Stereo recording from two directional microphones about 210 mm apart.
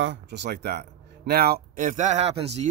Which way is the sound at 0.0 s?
60° right (ahead or behind).